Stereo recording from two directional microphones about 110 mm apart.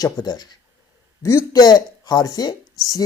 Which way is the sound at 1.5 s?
40° left (ahead or behind).